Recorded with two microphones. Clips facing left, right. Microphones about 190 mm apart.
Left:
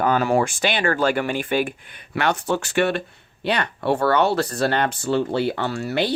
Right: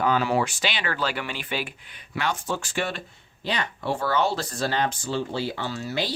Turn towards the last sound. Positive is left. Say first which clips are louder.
# left 6 dB
turn(degrees=60)  # may be behind; listen again after turning